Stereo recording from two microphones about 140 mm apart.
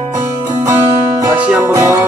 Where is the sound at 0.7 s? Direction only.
25° right (ahead or behind).